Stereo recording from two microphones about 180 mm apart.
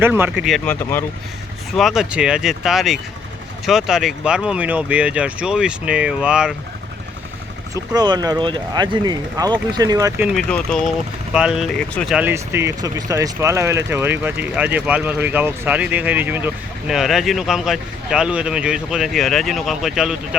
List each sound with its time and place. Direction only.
0.0 s speech: 10° right (ahead or behind); by 1.0 s 10° left (ahead or behind)
1.7 s speech: centre (ahead or behind)
7.7 s speech: 20° right (ahead or behind)
10.3 s speech: 5° left (ahead or behind)
12.1 s speech: 10° right (ahead or behind)